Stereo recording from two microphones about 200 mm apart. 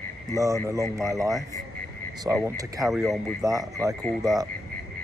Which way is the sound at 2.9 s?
Centre (ahead or behind).